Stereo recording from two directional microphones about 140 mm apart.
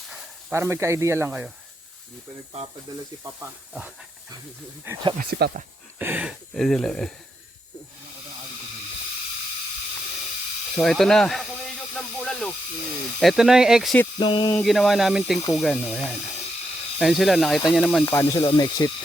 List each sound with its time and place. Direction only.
0.5 s speech: 20° right (ahead or behind)
3.7 s a sound: 10° right (ahead or behind)
5.1 s speech: 65° right (ahead or behind)
6.0 s a sound: 10° right (ahead or behind)
6.5 s speech: centre (ahead or behind)
10.8 s speech: 5° left (ahead or behind)
11.9 s hiss: 5° left (ahead or behind)
13.1 s speech: centre (ahead or behind)
14.2 s a sound: 35° left (ahead or behind)
14.5 s speech: centre (ahead or behind)
18.0 s speech: 20° left (ahead or behind)